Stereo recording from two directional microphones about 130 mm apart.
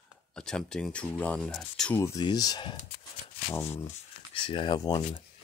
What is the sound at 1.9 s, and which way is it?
Speech, 20° left (ahead or behind).